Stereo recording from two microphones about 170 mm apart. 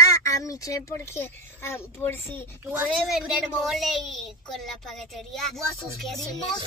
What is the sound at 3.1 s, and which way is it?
A woman's voice, centre (ahead or behind).